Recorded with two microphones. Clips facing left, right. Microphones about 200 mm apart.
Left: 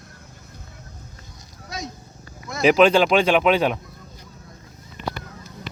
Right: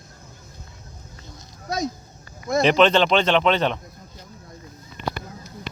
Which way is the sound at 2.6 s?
5° left (ahead or behind).